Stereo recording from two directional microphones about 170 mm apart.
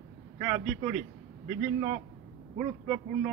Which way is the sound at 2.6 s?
15° right (ahead or behind).